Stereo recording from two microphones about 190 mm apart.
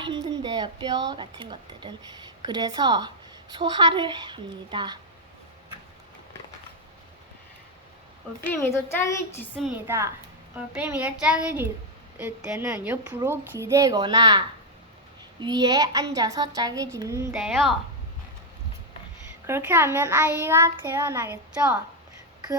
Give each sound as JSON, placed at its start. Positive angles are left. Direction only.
{"t": 0.0, "sound": "a woman's voice", "side_deg": -25}
{"t": 8.4, "sound": "a woman's voice", "side_deg": 10}
{"t": 9.7, "sound": "a child's voice", "side_deg": -15}
{"t": 17.3, "sound": "a woman's voice", "side_deg": 0}
{"t": 19.5, "sound": "a child's voice", "side_deg": -15}